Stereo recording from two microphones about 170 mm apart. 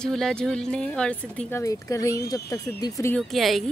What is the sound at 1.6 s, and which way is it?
Speech, 20° left (ahead or behind).